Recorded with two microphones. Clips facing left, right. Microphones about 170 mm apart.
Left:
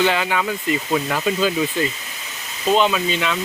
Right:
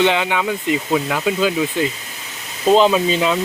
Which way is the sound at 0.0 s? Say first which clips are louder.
Right 2 dB; 20° right (ahead or behind).